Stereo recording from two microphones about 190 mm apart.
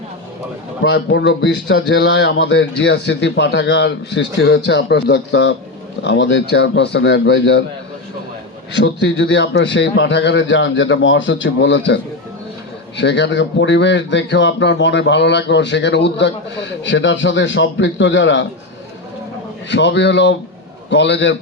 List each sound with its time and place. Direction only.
0.8 s speech: 60° left (ahead or behind)
8.7 s speech: 70° left (ahead or behind)
13.0 s speech: 70° left (ahead or behind)
19.7 s speech: 65° left (ahead or behind)